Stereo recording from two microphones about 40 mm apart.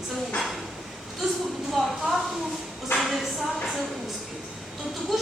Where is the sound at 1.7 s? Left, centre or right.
Centre.